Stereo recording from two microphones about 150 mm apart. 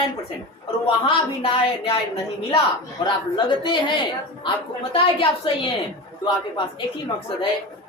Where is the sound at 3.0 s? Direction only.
30° left (ahead or behind).